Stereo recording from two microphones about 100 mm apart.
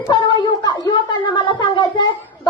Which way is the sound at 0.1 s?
50° left (ahead or behind).